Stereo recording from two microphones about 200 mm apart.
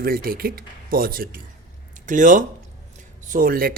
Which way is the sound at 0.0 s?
50° right (ahead or behind).